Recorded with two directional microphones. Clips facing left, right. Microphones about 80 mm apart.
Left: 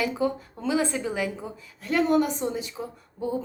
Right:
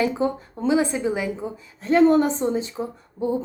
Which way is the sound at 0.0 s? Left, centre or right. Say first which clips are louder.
Right 4 dB; right.